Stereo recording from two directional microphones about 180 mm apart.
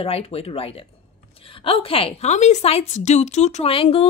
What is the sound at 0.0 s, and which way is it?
A woman's voice, 30° left (ahead or behind).